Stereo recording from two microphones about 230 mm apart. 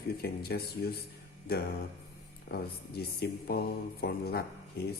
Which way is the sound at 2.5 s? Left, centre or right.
Left.